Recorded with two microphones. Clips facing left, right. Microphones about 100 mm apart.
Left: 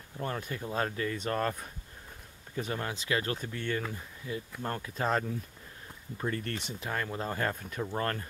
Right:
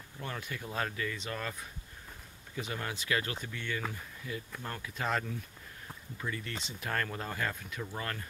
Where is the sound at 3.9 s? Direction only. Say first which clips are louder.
Left 3 dB; 25° left (ahead or behind).